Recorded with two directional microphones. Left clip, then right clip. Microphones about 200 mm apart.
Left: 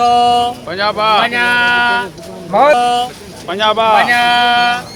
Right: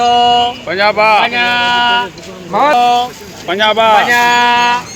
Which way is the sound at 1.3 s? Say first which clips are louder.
Even; centre (ahead or behind).